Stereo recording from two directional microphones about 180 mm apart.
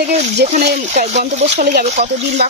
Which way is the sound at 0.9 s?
40° right (ahead or behind).